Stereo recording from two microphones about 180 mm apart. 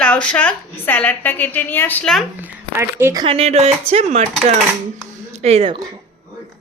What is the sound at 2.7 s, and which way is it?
Speech, 15° right (ahead or behind).